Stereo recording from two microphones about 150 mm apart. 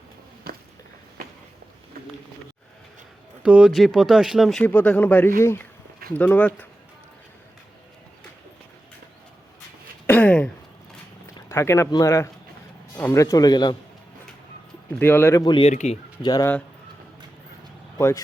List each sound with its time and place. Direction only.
0.5 s a sound: 85° right
3.4 s speech: 5° right (ahead or behind)
4.6 s speech: 10° left (ahead or behind)
10.1 s a sound: 10° left (ahead or behind)
11.9 s speech: 20° left (ahead or behind)
14.9 s speech: 15° left (ahead or behind)
15.4 s speech: 35° left (ahead or behind)
15.7 s speech: 50° left (ahead or behind)
16.2 s speech: 25° left (ahead or behind)
17.9 s speech: 20° left (ahead or behind)